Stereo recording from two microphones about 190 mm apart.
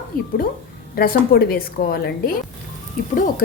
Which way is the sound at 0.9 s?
50° left (ahead or behind).